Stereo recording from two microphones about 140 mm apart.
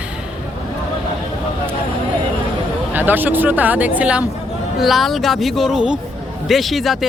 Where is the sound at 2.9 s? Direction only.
15° right (ahead or behind).